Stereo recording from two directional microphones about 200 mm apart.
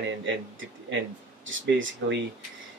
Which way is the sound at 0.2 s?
65° right (ahead or behind).